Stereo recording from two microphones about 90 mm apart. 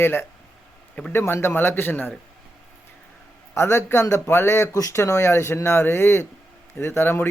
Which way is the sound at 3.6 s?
30° left (ahead or behind).